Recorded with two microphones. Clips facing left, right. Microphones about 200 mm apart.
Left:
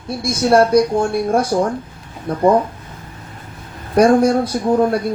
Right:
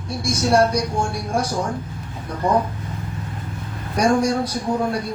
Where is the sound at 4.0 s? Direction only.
55° left (ahead or behind).